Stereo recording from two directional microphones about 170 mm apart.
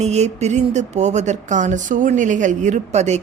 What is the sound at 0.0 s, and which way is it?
Speech, 40° right (ahead or behind).